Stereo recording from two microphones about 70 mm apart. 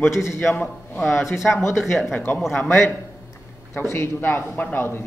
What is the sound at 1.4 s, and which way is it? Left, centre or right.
Speech, left.